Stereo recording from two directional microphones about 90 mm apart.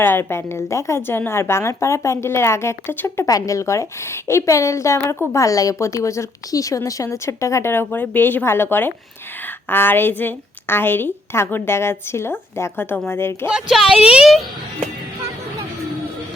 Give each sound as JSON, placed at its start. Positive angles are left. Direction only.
{"t": 0.0, "sound": "a woman's voice", "side_deg": 25}
{"t": 3.2, "sound": "a woman's voice", "side_deg": 40}
{"t": 13.5, "sound": "speech", "side_deg": -5}